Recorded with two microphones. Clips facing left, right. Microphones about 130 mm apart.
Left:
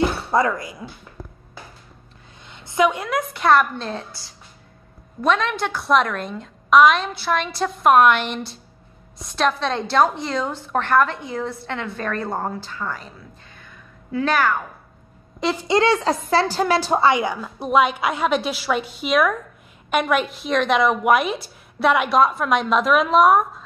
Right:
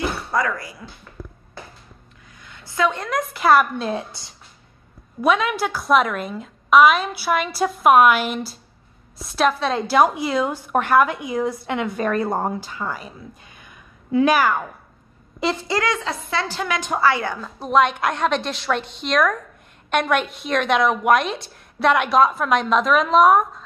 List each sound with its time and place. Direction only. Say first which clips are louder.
0.3 s speech: left 3 dB; 25° left (ahead or behind)
2.4 s a woman's voice: left 3 dB; 20° left (ahead or behind); by 4.0 s 10° right (ahead or behind)
5.2 s a woman's voice: right 1 dB; 5° right (ahead or behind)
13.6 s a sound: left 1 dB; 15° right (ahead or behind)
15.5 s speech: left 9 dB; 20° left (ahead or behind)
15.9 s a woman's voice: left 6 dB; 40° left (ahead or behind)
17.1 s a woman's voice: left 3 dB; 10° left (ahead or behind)